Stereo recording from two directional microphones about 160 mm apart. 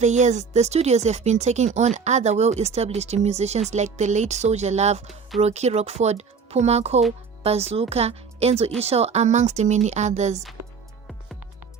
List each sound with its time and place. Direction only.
0.0 s speech: 45° right (ahead or behind)